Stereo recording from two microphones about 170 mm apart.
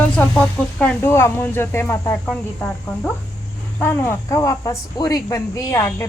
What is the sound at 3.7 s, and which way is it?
Speech, 15° left (ahead or behind).